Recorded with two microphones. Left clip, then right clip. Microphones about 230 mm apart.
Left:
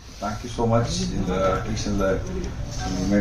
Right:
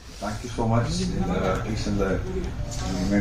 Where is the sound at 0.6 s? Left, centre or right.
Left.